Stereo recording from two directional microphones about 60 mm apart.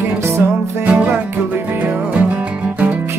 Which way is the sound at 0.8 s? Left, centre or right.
Right.